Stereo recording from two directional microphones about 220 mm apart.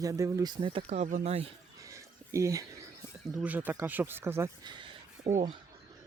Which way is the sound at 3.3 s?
5° right (ahead or behind).